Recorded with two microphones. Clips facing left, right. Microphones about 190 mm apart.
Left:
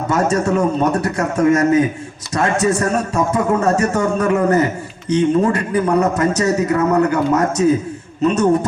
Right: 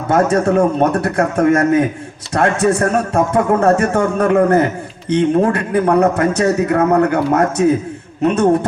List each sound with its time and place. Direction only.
0.1 s speech: 55° right (ahead or behind)